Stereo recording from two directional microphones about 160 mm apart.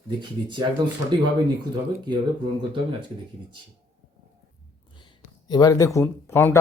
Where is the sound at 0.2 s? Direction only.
30° right (ahead or behind).